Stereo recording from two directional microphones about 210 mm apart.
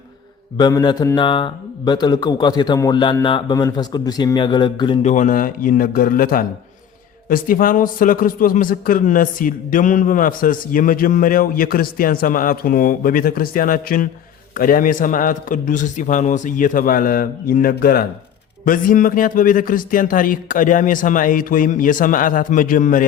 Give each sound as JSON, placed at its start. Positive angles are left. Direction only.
{"t": 0.5, "sound": "speech", "side_deg": 20}
{"t": 5.0, "sound": "a man's voice", "side_deg": 35}